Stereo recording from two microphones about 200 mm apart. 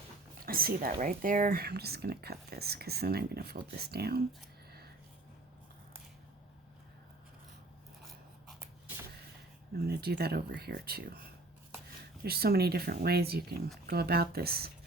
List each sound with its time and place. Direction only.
0.4 s speech: 45° right (ahead or behind)
9.7 s speech: 50° right (ahead or behind)
12.2 s speech: 50° right (ahead or behind)